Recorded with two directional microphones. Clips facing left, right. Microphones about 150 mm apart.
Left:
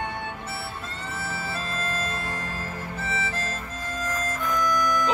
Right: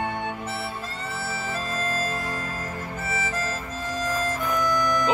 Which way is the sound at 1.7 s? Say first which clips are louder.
Right 3 dB; 10° right (ahead or behind).